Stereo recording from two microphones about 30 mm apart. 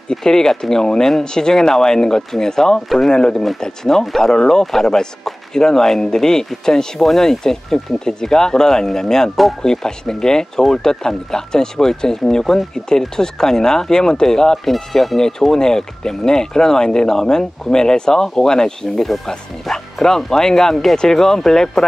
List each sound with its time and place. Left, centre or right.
0.1 s speech: centre
7.0 s speech: centre
14.6 s speech: centre
15.5 s speech: left